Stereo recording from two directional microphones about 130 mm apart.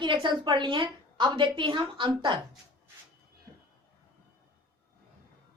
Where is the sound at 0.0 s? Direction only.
35° right (ahead or behind).